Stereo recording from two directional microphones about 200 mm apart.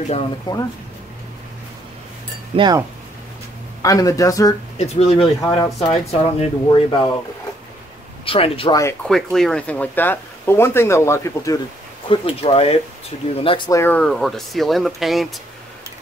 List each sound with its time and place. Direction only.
0.5 s speech: 20° left (ahead or behind)
2.5 s speech: 20° right (ahead or behind)
3.8 s speech: 15° left (ahead or behind)
4.7 s speech: 30° left (ahead or behind)
8.3 s speech: 25° left (ahead or behind)
9.0 s speech: centre (ahead or behind)
12.1 s speech: 25° left (ahead or behind); by 15.2 s centre (ahead or behind)